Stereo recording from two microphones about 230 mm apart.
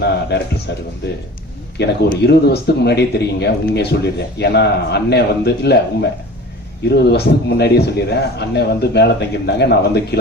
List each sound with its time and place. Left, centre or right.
0.0 s a man's voice: left